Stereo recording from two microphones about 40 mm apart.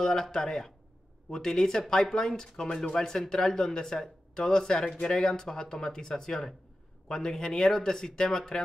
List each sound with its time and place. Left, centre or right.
0.0 s speech: centre